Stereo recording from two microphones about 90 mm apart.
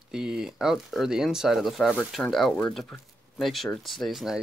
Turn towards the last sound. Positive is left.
turn(degrees=0)  # may be behind; listen again after turning